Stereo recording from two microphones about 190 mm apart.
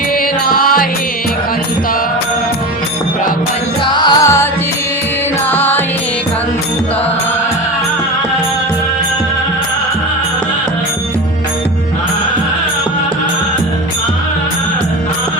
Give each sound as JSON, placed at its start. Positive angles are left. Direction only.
{"t": 0.4, "sound": "music", "side_deg": 50}
{"t": 3.9, "sound": "music", "side_deg": 20}
{"t": 5.5, "sound": "music", "side_deg": 10}